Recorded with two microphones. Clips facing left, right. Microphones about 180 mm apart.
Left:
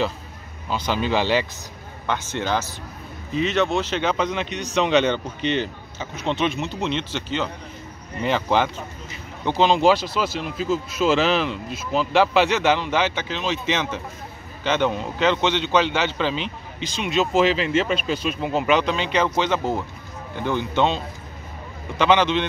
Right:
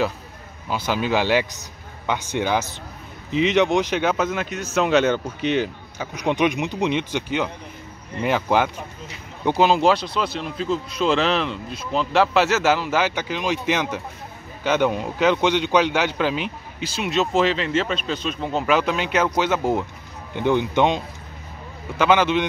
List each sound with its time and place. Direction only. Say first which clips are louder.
0.7 s a man's voice: right 1 dB; 10° right (ahead or behind)
18.8 s speech: even; 10° right (ahead or behind)